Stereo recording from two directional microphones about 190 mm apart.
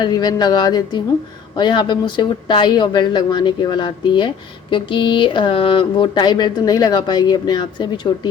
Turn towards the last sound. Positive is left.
turn(degrees=20)  # may be behind; listen again after turning